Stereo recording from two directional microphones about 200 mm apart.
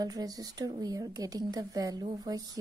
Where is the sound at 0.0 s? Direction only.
20° right (ahead or behind).